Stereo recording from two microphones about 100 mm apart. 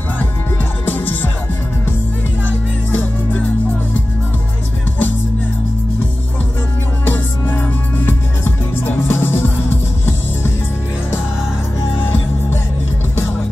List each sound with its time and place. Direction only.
0.8 s music: 20° left (ahead or behind)
2.9 s music: 20° left (ahead or behind)
7.1 s music: 20° left (ahead or behind)